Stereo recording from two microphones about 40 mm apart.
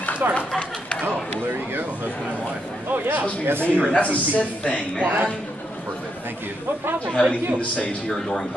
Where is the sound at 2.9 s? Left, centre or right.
Right.